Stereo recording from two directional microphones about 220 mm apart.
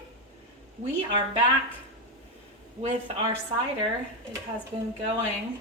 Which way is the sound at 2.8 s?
25° right (ahead or behind).